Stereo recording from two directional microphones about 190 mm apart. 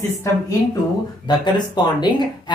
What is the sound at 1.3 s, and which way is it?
Speech, 20° left (ahead or behind).